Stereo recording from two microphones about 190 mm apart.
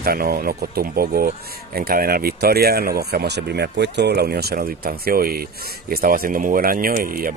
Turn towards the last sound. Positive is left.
turn(degrees=-50)  # may be behind; listen again after turning